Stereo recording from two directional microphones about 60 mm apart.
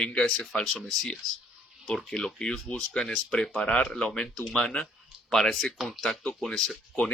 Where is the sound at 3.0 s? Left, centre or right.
Centre.